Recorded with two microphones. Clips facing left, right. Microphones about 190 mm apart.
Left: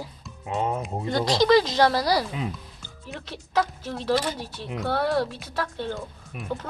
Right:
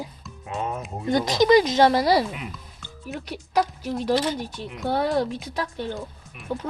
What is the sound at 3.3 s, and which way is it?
Speech, 15° right (ahead or behind).